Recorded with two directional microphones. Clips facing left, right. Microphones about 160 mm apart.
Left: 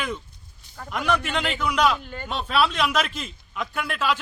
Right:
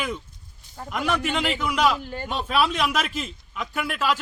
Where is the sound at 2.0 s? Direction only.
30° right (ahead or behind).